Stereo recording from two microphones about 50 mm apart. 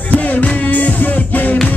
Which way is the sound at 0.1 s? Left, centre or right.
Left.